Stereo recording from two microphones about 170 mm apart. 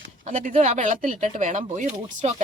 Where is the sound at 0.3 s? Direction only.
45° right (ahead or behind).